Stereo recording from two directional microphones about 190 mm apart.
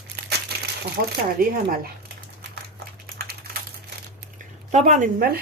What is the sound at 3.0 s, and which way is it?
Typing, 50° right (ahead or behind).